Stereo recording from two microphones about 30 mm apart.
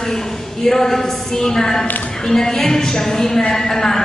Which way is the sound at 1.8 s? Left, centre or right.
Left.